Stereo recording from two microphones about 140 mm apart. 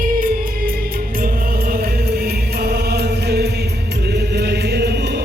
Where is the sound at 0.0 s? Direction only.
80° right.